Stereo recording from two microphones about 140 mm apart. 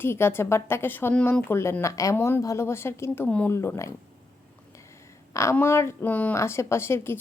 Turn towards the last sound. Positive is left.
turn(degrees=15)  # may be behind; listen again after turning